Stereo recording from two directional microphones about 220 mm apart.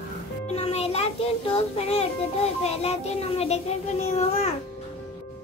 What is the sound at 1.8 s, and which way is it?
Speech, 30° left (ahead or behind).